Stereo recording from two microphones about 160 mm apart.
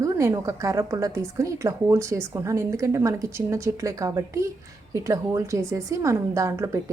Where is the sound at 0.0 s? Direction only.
20° right (ahead or behind).